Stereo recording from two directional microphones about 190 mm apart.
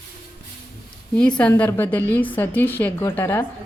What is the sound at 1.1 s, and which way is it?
A woman's voice, 5° left (ahead or behind).